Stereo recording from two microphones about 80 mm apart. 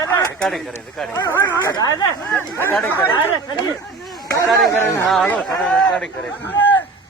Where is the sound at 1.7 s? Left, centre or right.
Left.